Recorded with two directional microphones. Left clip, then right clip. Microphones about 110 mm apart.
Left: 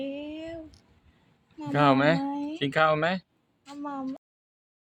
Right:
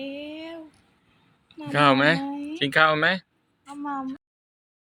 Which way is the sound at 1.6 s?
15° left (ahead or behind).